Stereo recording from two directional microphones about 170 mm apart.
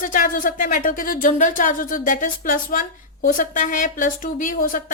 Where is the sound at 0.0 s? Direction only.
55° left (ahead or behind).